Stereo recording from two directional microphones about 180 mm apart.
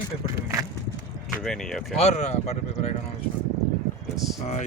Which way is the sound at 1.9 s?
35° left (ahead or behind).